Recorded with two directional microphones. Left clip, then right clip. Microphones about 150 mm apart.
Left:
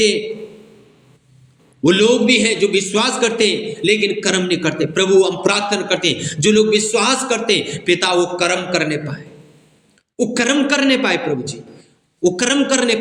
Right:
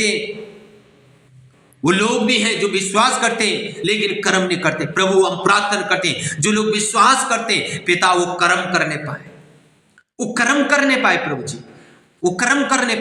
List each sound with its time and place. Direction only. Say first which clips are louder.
1.8 s a man's voice: left 4 dB; 15° left (ahead or behind)